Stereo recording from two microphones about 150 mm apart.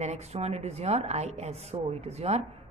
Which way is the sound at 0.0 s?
45° right (ahead or behind).